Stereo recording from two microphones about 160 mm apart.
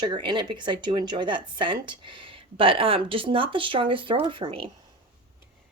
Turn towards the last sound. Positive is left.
turn(degrees=-35)  # may be behind; listen again after turning